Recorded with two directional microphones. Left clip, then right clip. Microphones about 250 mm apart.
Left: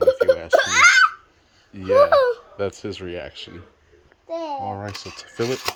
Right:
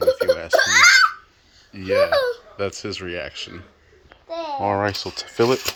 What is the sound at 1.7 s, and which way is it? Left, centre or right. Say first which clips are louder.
Speech: left 3 dB; centre.